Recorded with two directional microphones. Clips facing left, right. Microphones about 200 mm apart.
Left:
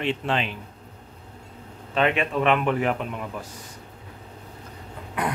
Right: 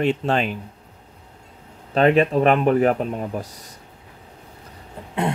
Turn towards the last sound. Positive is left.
turn(degrees=-25)  # may be behind; listen again after turning